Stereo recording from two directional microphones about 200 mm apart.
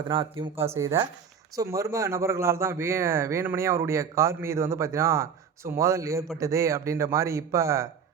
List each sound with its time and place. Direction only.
0.1 s speech: 25° right (ahead or behind)
0.5 s speech: 15° right (ahead or behind)